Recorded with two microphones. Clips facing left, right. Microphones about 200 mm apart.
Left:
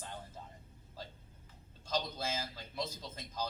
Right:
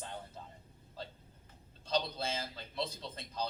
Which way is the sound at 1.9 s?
30° right (ahead or behind).